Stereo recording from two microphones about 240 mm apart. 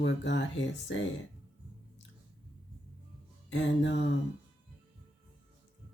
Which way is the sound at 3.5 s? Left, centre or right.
Left.